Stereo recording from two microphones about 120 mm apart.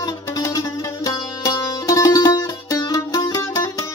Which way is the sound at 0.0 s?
30° left (ahead or behind).